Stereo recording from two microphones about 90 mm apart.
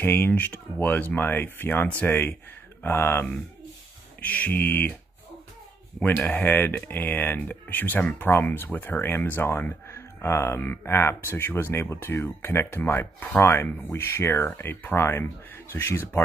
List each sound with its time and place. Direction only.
0.0 s speech: 25° left (ahead or behind)
6.0 s speech: 20° left (ahead or behind)